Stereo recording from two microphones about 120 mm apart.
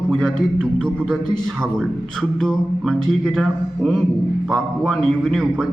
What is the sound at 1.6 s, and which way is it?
A man's voice, 5° left (ahead or behind).